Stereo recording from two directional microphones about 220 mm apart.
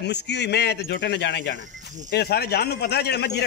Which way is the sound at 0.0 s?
50° left (ahead or behind).